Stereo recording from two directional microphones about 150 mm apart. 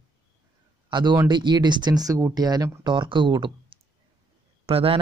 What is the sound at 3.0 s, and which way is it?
Speech, 35° right (ahead or behind).